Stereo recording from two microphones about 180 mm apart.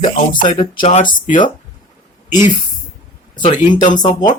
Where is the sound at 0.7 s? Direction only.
45° left (ahead or behind).